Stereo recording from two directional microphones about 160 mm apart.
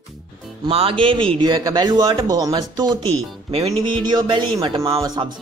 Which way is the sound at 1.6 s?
20° right (ahead or behind).